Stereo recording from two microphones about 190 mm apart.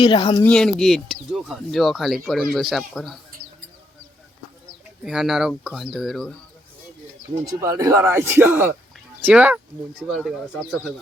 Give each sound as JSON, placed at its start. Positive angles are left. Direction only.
{"t": 0.0, "sound": "speech", "side_deg": 25}
{"t": 0.4, "sound": "speech", "side_deg": 5}
{"t": 5.0, "sound": "speech", "side_deg": -5}
{"t": 7.4, "sound": "speech", "side_deg": -15}